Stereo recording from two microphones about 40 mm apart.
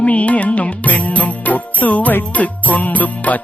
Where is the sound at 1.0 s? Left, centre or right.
Left.